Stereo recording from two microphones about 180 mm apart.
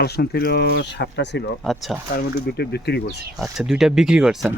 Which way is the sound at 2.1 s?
60° left (ahead or behind).